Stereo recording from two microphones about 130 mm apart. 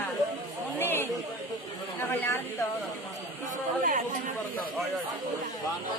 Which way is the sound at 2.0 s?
15° left (ahead or behind).